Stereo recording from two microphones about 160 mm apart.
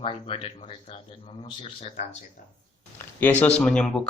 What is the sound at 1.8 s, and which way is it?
Speech, 45° left (ahead or behind).